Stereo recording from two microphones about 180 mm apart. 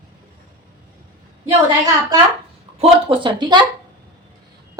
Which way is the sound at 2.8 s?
30° right (ahead or behind).